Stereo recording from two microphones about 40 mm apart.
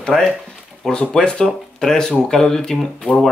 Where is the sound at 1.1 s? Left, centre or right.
Left.